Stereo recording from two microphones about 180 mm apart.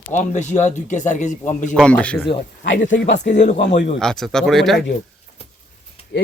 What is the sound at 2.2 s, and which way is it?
Speech, 75° left (ahead or behind).